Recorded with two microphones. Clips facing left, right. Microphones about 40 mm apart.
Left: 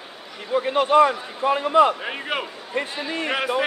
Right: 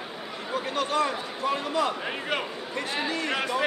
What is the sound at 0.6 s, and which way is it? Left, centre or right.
Speech, left.